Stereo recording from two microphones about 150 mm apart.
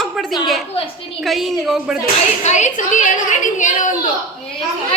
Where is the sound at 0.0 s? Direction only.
Centre (ahead or behind).